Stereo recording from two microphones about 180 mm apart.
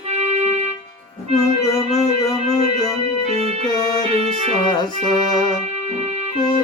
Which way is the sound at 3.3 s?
35° right (ahead or behind).